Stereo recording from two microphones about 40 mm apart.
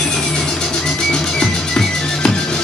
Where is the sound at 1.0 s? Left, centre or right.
Centre.